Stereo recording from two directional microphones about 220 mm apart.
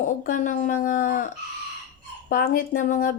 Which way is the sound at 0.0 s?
35° left (ahead or behind).